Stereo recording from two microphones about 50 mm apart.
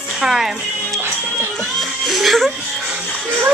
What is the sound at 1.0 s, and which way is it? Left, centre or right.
Music, right.